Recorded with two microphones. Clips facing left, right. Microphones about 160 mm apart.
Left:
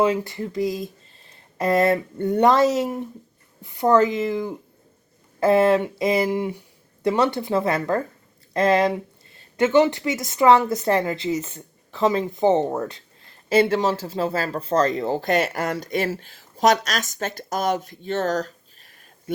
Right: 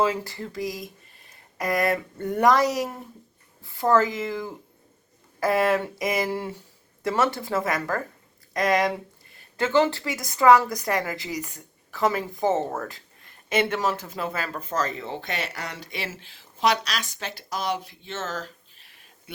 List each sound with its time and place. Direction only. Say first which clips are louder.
0.0 s speech: left 4 dB; 20° left (ahead or behind)
13.5 s speech: left 6 dB; 30° left (ahead or behind)